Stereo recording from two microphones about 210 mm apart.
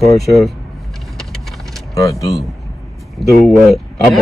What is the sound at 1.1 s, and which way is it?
Vehicle, centre (ahead or behind).